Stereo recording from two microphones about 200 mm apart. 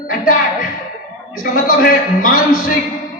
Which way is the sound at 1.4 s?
45° left (ahead or behind).